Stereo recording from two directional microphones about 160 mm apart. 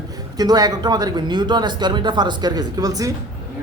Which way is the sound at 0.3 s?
25° right (ahead or behind).